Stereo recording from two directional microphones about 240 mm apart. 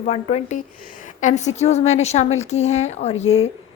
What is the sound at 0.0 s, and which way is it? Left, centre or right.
A woman's voice, left.